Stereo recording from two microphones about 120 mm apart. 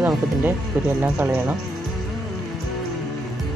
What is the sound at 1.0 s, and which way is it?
Speech, 10° right (ahead or behind).